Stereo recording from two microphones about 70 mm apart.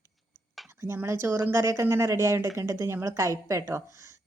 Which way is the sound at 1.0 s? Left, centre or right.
Right.